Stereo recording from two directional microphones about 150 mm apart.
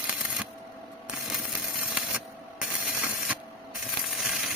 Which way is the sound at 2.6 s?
5° right (ahead or behind).